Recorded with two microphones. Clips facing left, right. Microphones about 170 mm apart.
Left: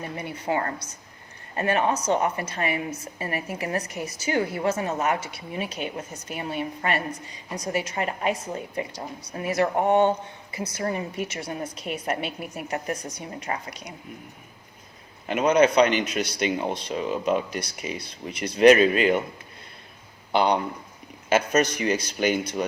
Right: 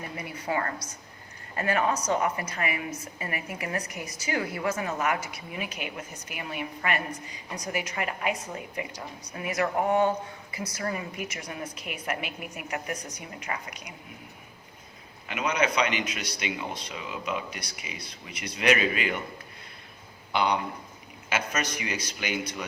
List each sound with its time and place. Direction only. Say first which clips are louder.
0.2 s a woman's voice: left 3 dB; 30° left (ahead or behind)
15.3 s a man's voice: left 8 dB; 45° left (ahead or behind)
20.3 s a woman's voice: left 5 dB; 35° left (ahead or behind)